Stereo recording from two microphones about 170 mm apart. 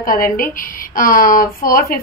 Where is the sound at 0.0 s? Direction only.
55° left (ahead or behind).